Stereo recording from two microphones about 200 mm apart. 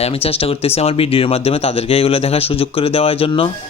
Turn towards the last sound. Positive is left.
turn(degrees=30)  # may be behind; listen again after turning